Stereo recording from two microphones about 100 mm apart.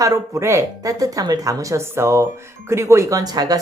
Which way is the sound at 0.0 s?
35° right (ahead or behind).